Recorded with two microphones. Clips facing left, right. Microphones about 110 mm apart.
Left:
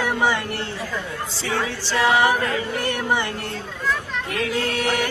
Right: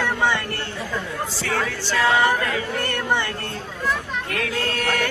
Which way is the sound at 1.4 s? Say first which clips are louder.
Left 1 dB; 20° left (ahead or behind).